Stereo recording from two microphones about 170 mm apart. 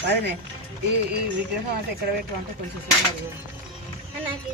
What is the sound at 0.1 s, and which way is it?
Speech, 90° right.